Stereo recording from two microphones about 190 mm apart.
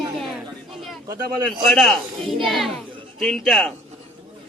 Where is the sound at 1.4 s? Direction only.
Centre (ahead or behind).